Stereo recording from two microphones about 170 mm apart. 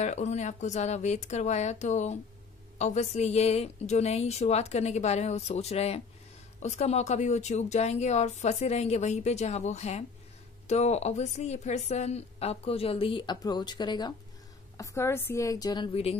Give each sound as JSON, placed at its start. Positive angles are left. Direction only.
{"t": 0.0, "sound": "a woman's voice", "side_deg": 45}